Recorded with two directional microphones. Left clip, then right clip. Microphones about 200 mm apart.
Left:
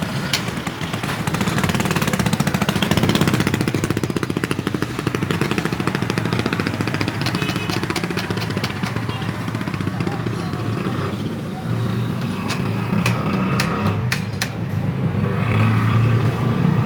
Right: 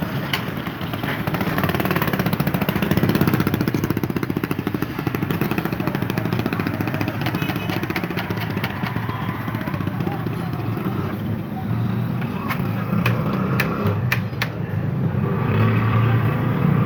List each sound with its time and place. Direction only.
1.6 s vehicle: 20° right (ahead or behind); by 3.8 s 40° right (ahead or behind)